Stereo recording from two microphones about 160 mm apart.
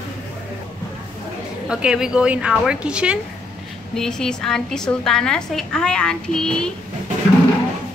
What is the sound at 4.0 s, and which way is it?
A woman's voice, 5° left (ahead or behind).